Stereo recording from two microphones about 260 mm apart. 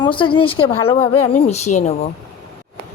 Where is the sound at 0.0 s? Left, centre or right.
Centre.